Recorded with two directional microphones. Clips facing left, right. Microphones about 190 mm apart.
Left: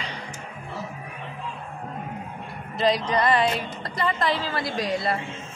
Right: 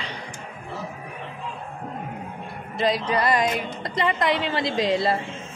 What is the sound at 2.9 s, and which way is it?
A woman's voice, 5° right (ahead or behind).